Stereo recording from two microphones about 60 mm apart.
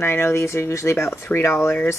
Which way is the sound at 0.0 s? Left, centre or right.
Left.